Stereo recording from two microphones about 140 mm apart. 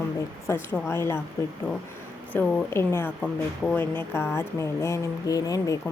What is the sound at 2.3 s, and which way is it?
A woman's voice, 10° left (ahead or behind).